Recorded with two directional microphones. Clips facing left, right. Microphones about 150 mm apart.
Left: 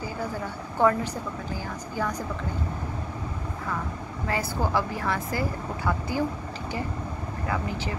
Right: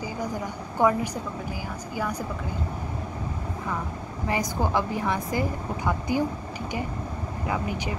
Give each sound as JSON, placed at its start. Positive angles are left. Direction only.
{"t": 0.2, "sound": "speech", "side_deg": -15}
{"t": 4.3, "sound": "speech", "side_deg": -15}
{"t": 7.4, "sound": "speech", "side_deg": -15}